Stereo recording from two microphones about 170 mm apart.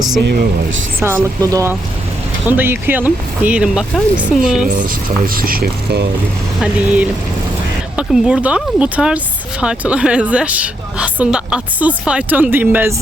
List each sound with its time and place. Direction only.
0.9 s speech: 15° right (ahead or behind)
4.7 s speech: 55° right (ahead or behind)
6.6 s speech: 10° right (ahead or behind)